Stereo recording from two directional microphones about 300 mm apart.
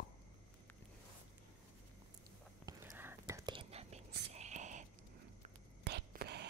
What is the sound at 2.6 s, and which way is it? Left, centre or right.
Whispering, centre.